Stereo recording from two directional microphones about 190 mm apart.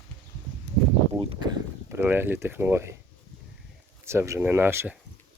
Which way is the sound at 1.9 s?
10° right (ahead or behind).